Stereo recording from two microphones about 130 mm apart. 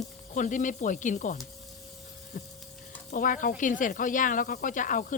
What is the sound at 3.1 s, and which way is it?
Speech, 90° left.